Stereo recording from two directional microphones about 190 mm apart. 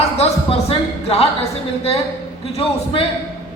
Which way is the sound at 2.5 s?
30° left (ahead or behind).